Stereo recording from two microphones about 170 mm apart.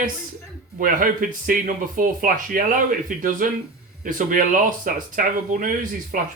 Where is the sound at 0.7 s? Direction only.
55° right (ahead or behind).